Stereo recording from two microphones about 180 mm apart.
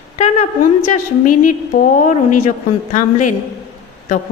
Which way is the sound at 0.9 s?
45° left (ahead or behind).